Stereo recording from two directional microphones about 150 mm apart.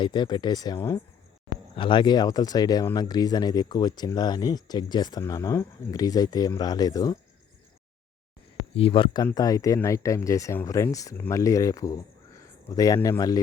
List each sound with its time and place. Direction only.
0.0 s speech: 30° left (ahead or behind)
8.7 s speech: 40° left (ahead or behind)
9.2 s speech: 25° left (ahead or behind)